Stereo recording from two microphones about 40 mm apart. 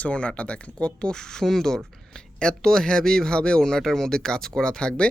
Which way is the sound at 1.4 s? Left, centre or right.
Centre.